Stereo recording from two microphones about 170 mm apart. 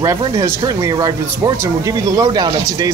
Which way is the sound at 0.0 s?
20° right (ahead or behind).